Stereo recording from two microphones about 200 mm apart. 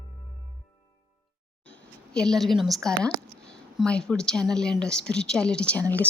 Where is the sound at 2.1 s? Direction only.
Centre (ahead or behind).